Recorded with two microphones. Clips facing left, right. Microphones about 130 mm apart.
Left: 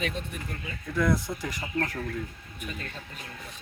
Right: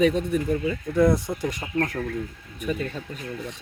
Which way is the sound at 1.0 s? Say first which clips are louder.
Right 6 dB; 25° right (ahead or behind).